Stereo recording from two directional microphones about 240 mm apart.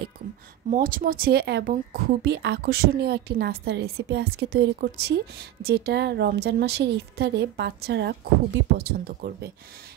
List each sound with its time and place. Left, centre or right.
0.7 s a woman's voice: right